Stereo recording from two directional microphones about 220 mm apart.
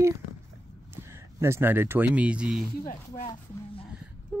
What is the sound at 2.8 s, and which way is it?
Speech, 35° left (ahead or behind).